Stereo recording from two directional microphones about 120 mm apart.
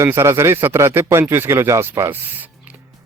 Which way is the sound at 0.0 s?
25° right (ahead or behind).